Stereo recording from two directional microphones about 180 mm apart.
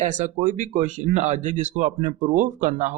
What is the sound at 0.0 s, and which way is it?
Speech, 40° right (ahead or behind).